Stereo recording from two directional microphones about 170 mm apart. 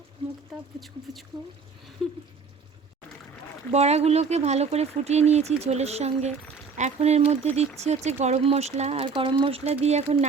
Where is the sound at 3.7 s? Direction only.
40° right (ahead or behind).